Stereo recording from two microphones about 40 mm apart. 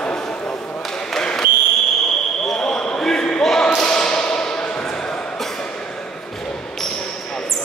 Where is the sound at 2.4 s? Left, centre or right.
Centre.